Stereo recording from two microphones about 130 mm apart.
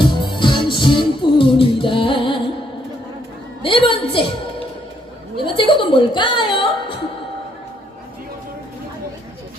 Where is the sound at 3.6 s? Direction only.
40° left (ahead or behind).